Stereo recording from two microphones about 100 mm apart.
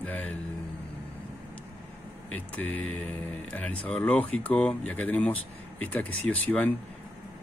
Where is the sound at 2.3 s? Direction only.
15° left (ahead or behind).